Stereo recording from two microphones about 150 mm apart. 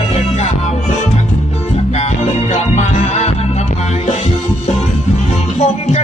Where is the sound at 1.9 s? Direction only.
45° left (ahead or behind).